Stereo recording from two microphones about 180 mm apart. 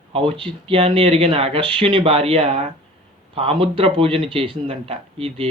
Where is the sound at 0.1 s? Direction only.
30° right (ahead or behind).